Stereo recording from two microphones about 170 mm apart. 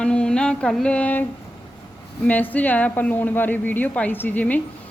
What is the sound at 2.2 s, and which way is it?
Speech, 10° left (ahead or behind).